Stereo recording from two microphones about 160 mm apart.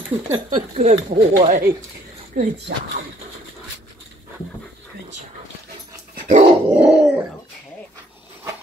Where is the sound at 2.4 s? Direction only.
55° right (ahead or behind).